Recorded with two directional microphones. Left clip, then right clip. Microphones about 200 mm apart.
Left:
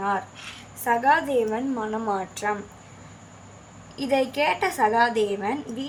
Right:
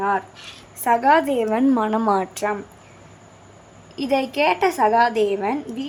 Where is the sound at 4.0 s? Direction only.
30° right (ahead or behind).